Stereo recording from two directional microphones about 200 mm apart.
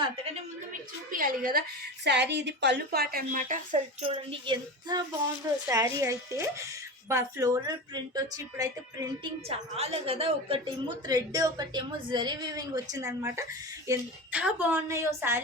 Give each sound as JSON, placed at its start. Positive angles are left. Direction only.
{"t": 1.1, "sound": "a woman's voice", "side_deg": -45}
{"t": 2.0, "sound": "a woman's voice", "side_deg": -60}
{"t": 4.0, "sound": "a woman's voice", "side_deg": -25}
{"t": 9.5, "sound": "a woman's voice", "side_deg": -30}